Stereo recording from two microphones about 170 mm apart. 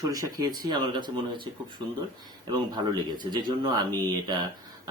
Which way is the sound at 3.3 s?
25° right (ahead or behind).